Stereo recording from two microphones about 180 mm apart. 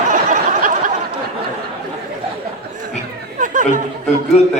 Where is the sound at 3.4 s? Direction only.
45° right (ahead or behind).